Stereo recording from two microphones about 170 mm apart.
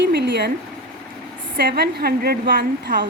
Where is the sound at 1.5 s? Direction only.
70° right (ahead or behind).